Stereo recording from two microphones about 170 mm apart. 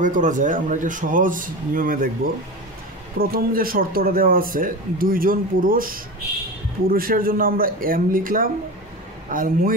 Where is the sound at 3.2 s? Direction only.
60° right (ahead or behind).